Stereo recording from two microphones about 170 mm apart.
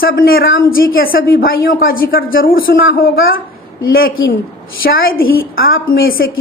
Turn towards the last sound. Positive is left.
turn(degrees=60)  # may be behind; listen again after turning